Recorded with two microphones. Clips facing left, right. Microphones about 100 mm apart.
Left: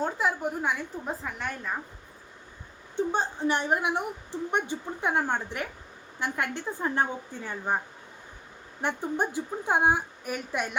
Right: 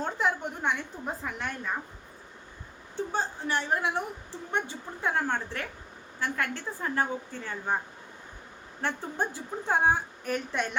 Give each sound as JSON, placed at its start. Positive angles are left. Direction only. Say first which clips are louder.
{"t": 0.0, "sound": "a woman's voice", "louder": "left 1 dB", "side_deg": 5}
{"t": 2.9, "sound": "a woman's voice", "louder": "left 3 dB", "side_deg": 20}
{"t": 8.8, "sound": "a woman's voice", "louder": "left 3 dB", "side_deg": 15}